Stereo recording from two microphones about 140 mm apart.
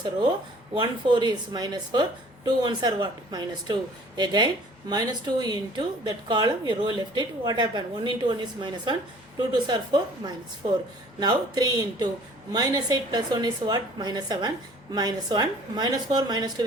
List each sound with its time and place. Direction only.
0.0 s a woman's voice: 35° right (ahead or behind)